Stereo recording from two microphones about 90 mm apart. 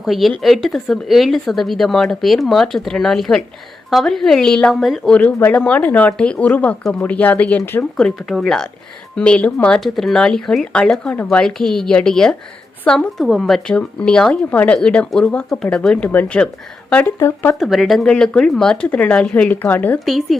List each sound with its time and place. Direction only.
0.0 s speech: centre (ahead or behind)
5.1 s speech: 20° left (ahead or behind)
7.9 s a woman's voice: 5° left (ahead or behind)
13.1 s speech: centre (ahead or behind); by 17.6 s 30° left (ahead or behind)
17.6 s speech: centre (ahead or behind); by 20.0 s 20° left (ahead or behind)
20.1 s speech: centre (ahead or behind)